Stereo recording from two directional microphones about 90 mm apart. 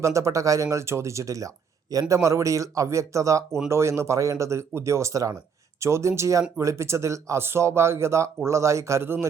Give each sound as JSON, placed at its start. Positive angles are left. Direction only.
{"t": 0.0, "sound": "speech", "side_deg": -35}